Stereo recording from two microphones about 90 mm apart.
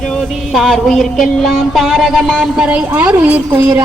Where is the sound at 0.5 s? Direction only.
Centre (ahead or behind).